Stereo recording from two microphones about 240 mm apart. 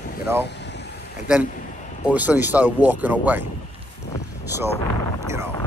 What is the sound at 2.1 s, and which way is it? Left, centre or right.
Speech, centre.